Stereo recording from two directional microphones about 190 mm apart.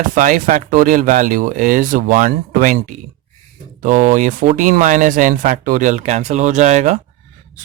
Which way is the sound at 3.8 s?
45° right (ahead or behind).